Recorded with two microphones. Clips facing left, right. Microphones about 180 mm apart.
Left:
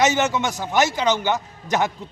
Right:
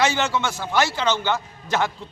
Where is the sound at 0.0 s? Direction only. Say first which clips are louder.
Left 2 dB; 20° left (ahead or behind).